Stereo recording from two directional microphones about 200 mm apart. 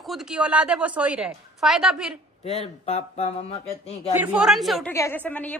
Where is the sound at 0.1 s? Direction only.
5° right (ahead or behind).